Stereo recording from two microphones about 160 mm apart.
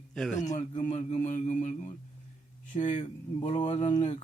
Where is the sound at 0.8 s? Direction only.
45° left (ahead or behind).